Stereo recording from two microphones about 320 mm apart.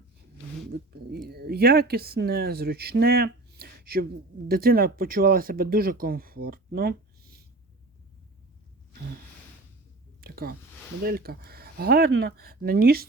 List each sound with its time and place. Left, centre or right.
0.7 s speech: right
10.2 s a sound: right
11.0 s speech: right